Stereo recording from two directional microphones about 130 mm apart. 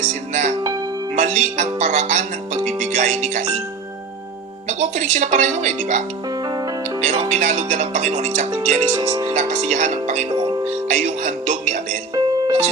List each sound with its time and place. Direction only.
0.1 s speech: 65° right (ahead or behind)
4.8 s speech: 65° right (ahead or behind)
7.0 s music: 55° right (ahead or behind)
8.6 s speech: 60° right (ahead or behind)
9.0 s speech: 25° right (ahead or behind)
9.3 s speech: 60° right (ahead or behind)
12.1 s music: 25° right (ahead or behind)